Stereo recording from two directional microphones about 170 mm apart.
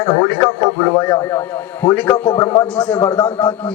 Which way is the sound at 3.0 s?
25° left (ahead or behind).